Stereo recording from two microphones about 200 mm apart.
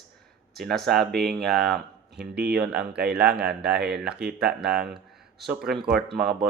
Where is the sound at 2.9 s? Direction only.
55° right (ahead or behind).